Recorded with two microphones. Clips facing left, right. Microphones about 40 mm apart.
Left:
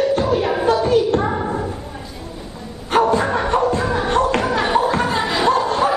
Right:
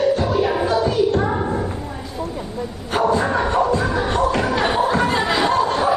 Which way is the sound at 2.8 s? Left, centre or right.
Left.